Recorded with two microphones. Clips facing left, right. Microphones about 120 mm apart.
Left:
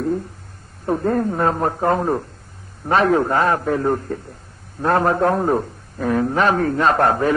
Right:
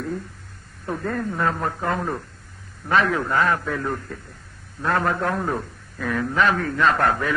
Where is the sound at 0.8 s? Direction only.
35° left (ahead or behind).